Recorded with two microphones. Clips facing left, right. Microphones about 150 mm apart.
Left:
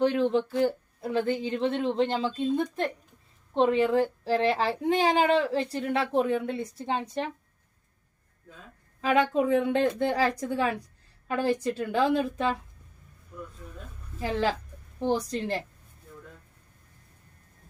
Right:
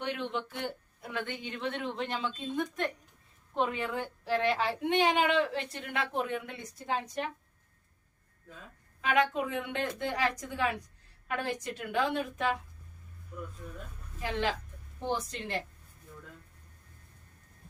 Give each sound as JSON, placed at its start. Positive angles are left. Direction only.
{"t": 0.0, "sound": "a child's voice", "side_deg": 35}
{"t": 9.0, "sound": "a child's voice", "side_deg": 35}
{"t": 14.2, "sound": "a child's voice", "side_deg": 35}